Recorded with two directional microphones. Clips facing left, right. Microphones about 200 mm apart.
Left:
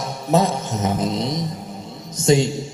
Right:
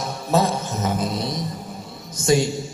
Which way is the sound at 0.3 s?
20° left (ahead or behind).